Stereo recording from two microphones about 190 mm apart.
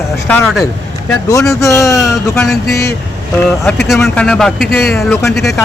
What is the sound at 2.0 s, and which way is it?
Speech, centre (ahead or behind).